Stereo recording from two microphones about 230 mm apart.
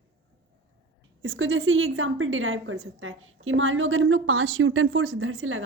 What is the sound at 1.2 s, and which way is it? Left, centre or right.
A woman's voice, right.